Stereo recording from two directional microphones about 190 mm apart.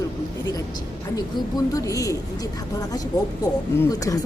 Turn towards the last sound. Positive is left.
turn(degrees=15)  # may be behind; listen again after turning